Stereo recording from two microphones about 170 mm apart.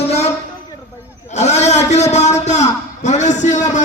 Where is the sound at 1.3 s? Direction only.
40° left (ahead or behind).